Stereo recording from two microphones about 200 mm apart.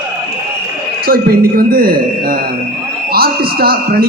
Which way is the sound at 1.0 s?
50° right (ahead or behind).